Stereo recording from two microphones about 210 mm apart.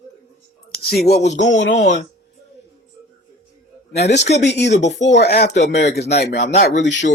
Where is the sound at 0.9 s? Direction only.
50° left (ahead or behind).